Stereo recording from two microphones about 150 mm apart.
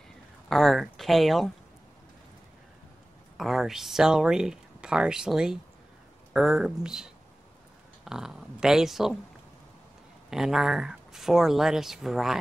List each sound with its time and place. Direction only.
0.5 s speech: centre (ahead or behind)
3.3 s speech: centre (ahead or behind)
10.3 s speech: 5° right (ahead or behind)